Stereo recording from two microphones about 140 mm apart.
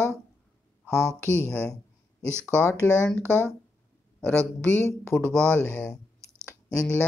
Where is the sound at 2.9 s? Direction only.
5° left (ahead or behind).